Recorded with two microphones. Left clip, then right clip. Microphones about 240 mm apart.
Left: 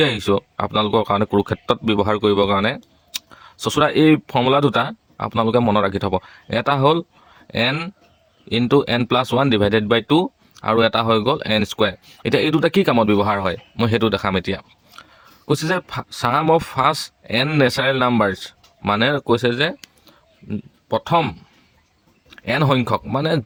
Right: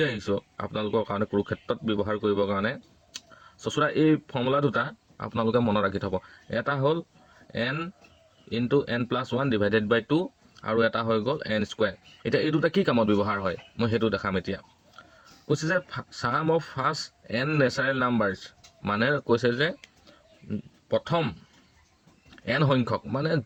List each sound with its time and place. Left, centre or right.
0.2 s speech: left
8.4 s speech: left
22.4 s speech: left